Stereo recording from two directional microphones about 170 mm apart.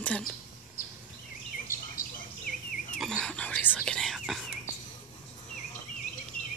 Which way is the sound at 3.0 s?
5° left (ahead or behind).